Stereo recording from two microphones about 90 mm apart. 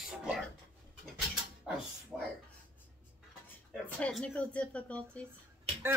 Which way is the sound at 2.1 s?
25° right (ahead or behind).